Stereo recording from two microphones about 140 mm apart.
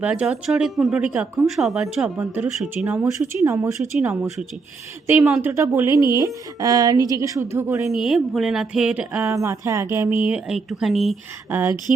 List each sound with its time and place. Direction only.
0.0 s speech: 10° right (ahead or behind)
2.1 s a woman's voice: 15° right (ahead or behind)
5.4 s a woman's voice: 20° right (ahead or behind)
7.9 s speech: centre (ahead or behind)
9.2 s a woman's voice: 20° right (ahead or behind); by 11.2 s centre (ahead or behind)
11.5 s a woman's voice: 15° right (ahead or behind)